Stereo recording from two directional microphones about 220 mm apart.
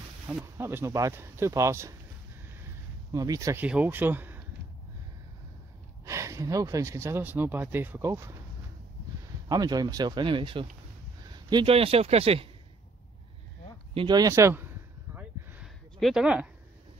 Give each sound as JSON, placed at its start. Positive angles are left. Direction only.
{"t": 0.3, "sound": "speech", "side_deg": -10}
{"t": 3.1, "sound": "speech", "side_deg": -15}
{"t": 6.0, "sound": "speech", "side_deg": -15}
{"t": 9.5, "sound": "speech", "side_deg": -15}
{"t": 13.9, "sound": "a sound", "side_deg": -20}